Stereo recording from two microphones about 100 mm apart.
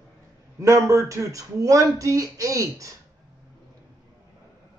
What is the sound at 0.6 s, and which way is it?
Speech, 30° right (ahead or behind).